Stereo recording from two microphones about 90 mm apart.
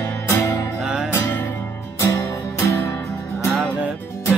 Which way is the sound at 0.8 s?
10° right (ahead or behind).